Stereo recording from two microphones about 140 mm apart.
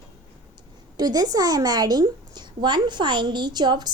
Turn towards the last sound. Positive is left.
turn(degrees=-30)  # may be behind; listen again after turning